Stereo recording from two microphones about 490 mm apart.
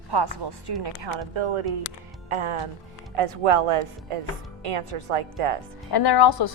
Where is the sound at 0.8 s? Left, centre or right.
Right.